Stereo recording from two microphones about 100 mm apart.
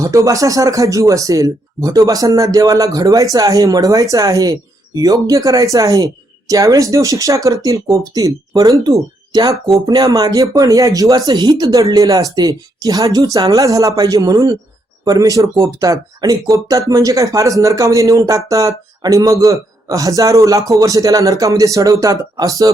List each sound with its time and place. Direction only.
0.0 s speech: 35° right (ahead or behind)